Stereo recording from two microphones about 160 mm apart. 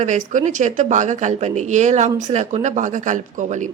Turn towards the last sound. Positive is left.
turn(degrees=-50)  # may be behind; listen again after turning